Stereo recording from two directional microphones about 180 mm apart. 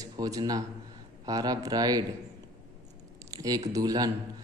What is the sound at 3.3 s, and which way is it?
Speech, 20° right (ahead or behind).